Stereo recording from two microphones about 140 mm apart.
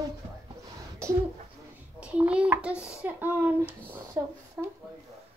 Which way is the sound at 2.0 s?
10° right (ahead or behind).